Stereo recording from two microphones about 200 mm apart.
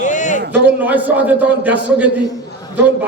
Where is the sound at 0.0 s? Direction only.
40° left (ahead or behind).